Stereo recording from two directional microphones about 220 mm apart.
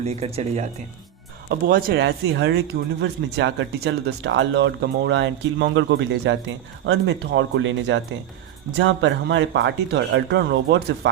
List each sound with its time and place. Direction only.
0.0 s speech: 30° right (ahead or behind)
1.5 s speech: 45° right (ahead or behind)